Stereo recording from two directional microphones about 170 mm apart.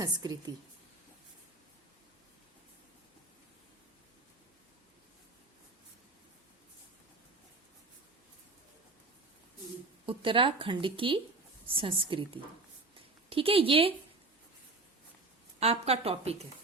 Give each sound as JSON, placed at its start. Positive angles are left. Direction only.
{"t": 0.0, "sound": "a woman's voice", "side_deg": -25}
{"t": 10.1, "sound": "speech", "side_deg": -30}
{"t": 15.6, "sound": "speech", "side_deg": -35}